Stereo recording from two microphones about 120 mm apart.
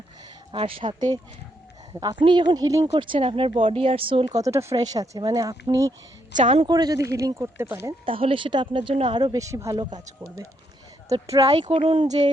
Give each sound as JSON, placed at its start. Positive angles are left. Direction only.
{"t": 0.5, "sound": "speech", "side_deg": -45}
{"t": 2.9, "sound": "speech", "side_deg": -50}
{"t": 4.3, "sound": "speech", "side_deg": -30}
{"t": 8.0, "sound": "speech", "side_deg": -50}
{"t": 11.4, "sound": "speech", "side_deg": -35}
{"t": 11.7, "sound": "speech", "side_deg": -50}
{"t": 12.0, "sound": "speech", "side_deg": -70}